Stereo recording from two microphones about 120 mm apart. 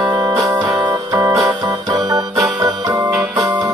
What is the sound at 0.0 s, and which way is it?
Music, 35° right (ahead or behind).